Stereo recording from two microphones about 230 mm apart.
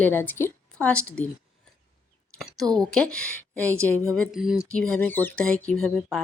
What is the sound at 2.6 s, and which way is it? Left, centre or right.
Speech, centre.